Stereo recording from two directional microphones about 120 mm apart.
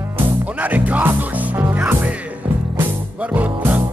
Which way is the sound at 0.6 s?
15° right (ahead or behind).